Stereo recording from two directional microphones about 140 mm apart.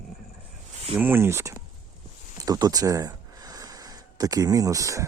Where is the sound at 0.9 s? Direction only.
15° right (ahead or behind).